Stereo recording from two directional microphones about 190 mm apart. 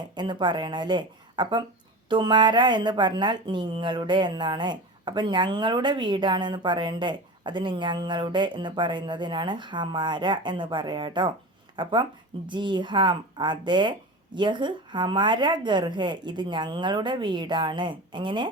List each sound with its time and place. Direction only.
0.1 s speech: 25° right (ahead or behind)